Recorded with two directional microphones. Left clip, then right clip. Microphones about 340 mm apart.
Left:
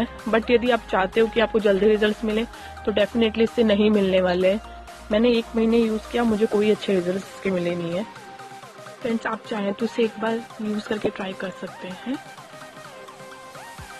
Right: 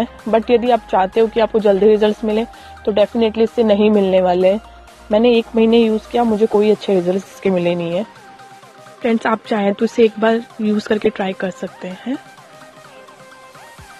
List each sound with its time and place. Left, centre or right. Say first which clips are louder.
0.0 s speech: right 6 dB; centre
9.2 s speech: right 10 dB; right
11.6 s speech: right 6 dB; centre